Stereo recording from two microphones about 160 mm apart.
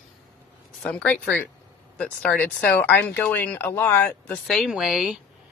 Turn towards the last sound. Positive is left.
turn(degrees=-5)  # may be behind; listen again after turning